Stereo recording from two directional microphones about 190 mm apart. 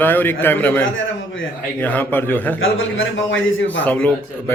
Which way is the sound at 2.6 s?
90° left.